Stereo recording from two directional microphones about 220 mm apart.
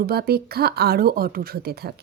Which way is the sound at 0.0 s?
45° right (ahead or behind).